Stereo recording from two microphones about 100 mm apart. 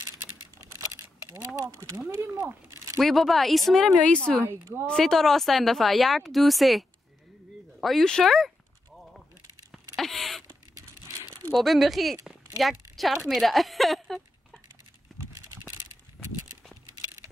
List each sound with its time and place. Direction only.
0.7 s a sound: 30° right (ahead or behind)
1.6 s a woman's voice: 30° right (ahead or behind)
3.0 s speech: centre (ahead or behind)
4.4 s a woman's voice: 25° right (ahead or behind)
4.8 s speech: 5° left (ahead or behind)
9.9 s a sound: centre (ahead or behind)
11.5 s speech: centre (ahead or behind)